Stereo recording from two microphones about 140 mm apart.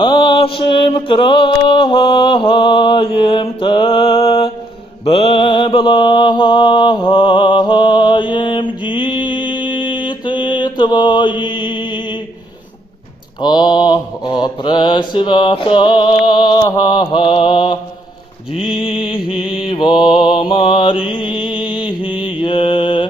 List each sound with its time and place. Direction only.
0.0 s mantra: 35° left (ahead or behind)
13.4 s mantra: 30° left (ahead or behind)